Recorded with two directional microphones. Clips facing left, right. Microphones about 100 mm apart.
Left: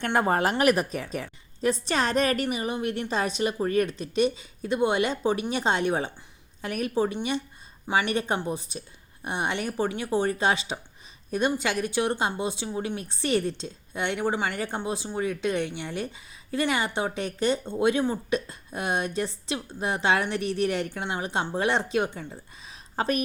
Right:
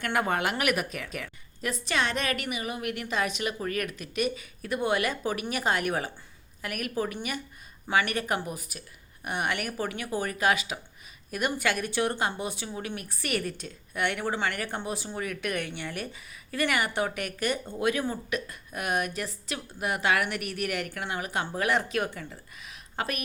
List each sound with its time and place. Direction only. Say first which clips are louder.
0.0 s a woman's voice: left 4 dB; 30° left (ahead or behind)